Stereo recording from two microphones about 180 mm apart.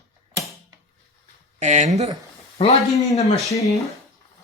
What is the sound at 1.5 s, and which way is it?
Speech, 40° right (ahead or behind).